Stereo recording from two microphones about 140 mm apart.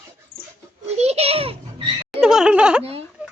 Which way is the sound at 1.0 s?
50° right (ahead or behind).